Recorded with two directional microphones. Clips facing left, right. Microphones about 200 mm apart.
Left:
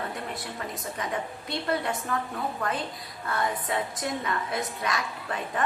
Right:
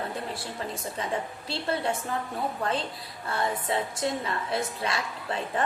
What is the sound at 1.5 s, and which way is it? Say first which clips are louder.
Speech: even; 30° right (ahead or behind).